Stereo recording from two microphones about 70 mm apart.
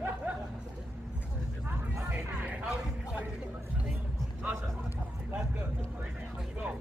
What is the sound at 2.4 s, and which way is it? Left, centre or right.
Speech, centre.